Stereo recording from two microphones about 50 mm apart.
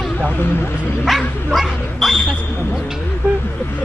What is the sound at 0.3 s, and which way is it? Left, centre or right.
Speech, left.